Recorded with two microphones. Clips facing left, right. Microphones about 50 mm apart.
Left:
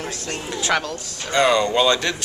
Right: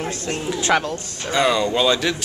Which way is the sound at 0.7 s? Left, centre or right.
Centre.